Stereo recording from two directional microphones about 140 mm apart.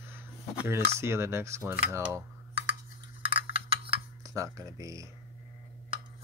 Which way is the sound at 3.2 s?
40° right (ahead or behind).